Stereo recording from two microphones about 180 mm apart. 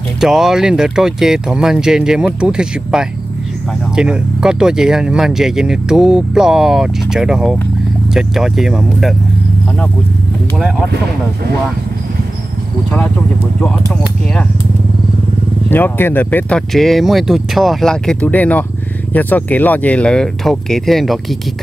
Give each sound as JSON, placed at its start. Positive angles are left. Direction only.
{"t": 0.2, "sound": "speech", "side_deg": 0}
{"t": 15.7, "sound": "speech", "side_deg": 10}